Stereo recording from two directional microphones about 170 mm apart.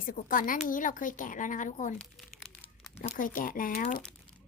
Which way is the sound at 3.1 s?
50° left (ahead or behind).